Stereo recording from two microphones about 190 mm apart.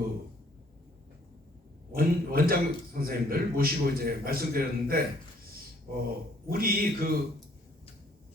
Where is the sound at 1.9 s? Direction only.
50° right (ahead or behind).